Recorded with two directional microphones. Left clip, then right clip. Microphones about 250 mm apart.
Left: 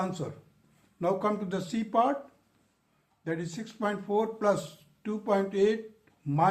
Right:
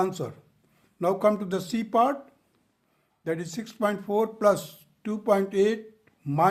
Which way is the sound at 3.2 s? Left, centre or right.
Right.